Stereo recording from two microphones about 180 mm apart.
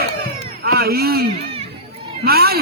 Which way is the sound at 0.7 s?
60° right (ahead or behind).